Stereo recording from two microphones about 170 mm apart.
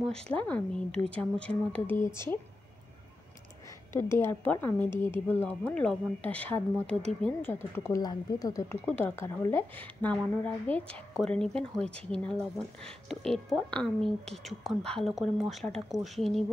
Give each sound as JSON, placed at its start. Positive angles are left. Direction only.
{"t": 0.0, "sound": "speech", "side_deg": 5}
{"t": 3.9, "sound": "speech", "side_deg": 15}